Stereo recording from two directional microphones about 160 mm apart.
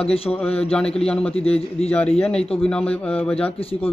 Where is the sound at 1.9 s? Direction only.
10° left (ahead or behind).